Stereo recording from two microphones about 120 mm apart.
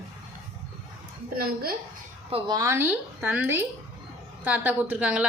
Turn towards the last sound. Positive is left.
turn(degrees=-10)  # may be behind; listen again after turning